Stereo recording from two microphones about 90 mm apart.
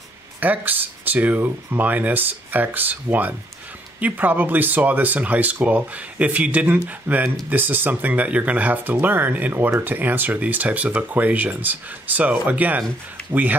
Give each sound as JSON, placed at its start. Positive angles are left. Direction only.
{"t": 0.4, "sound": "speech", "side_deg": -20}